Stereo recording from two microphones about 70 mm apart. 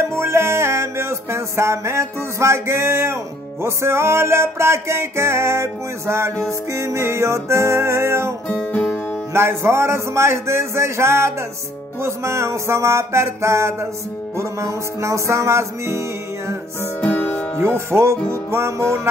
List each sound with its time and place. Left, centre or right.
0.1 s music: right
17.0 s music: left
17.6 s music: right